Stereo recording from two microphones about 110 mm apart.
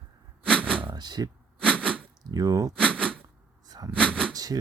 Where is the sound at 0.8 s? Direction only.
45° right (ahead or behind).